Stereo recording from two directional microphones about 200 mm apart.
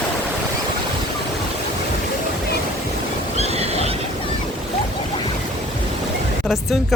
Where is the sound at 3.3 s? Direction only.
30° right (ahead or behind).